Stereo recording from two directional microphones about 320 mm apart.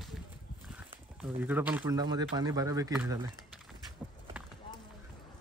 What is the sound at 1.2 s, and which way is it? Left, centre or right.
Speech, centre.